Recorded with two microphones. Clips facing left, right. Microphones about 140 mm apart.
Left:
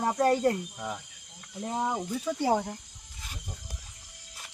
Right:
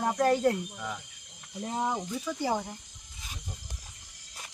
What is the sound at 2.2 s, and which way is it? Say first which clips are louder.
Speech: left 6 dB; 30° left (ahead or behind).